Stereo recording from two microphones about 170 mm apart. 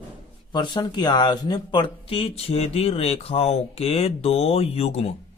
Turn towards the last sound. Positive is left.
turn(degrees=35)  # may be behind; listen again after turning